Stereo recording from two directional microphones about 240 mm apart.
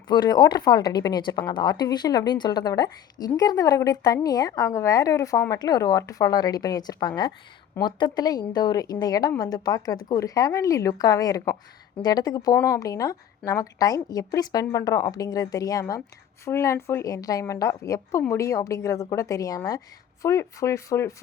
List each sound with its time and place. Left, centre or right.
0.1 s a woman's voice: centre